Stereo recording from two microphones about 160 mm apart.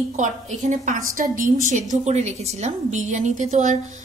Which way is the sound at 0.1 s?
45° right (ahead or behind).